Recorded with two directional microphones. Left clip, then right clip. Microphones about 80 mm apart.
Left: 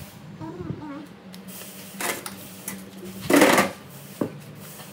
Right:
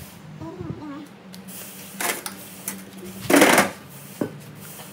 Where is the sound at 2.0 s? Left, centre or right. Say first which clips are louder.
Right 2 dB; centre.